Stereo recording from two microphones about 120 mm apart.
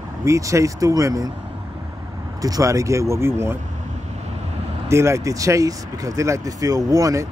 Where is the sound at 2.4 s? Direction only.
25° right (ahead or behind).